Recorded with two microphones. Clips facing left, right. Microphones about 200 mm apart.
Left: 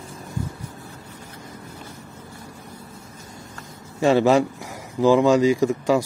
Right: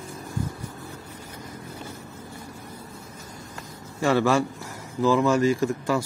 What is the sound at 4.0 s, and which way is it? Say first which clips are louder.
Speech: left 4 dB; 20° left (ahead or behind).